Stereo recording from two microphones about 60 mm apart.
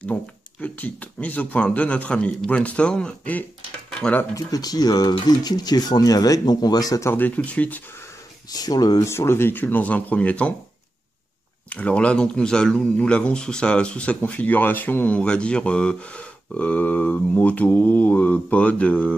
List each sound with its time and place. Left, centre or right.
0.0 s speech: left
4.5 s speech: left
7.2 s speech: left
8.5 s speech: left
9.0 s speech: left
11.7 s speech: left
15.1 s speech: centre